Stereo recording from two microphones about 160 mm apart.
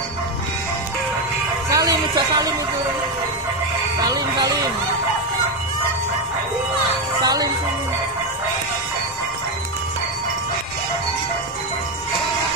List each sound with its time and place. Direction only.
1.7 s a sound: 20° right (ahead or behind)
4.0 s speech: 25° right (ahead or behind)
7.2 s music: 25° right (ahead or behind)